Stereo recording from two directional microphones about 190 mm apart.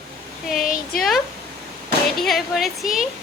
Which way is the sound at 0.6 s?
45° left (ahead or behind).